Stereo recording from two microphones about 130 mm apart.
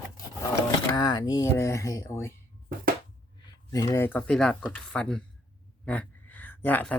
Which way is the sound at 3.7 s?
30° left (ahead or behind).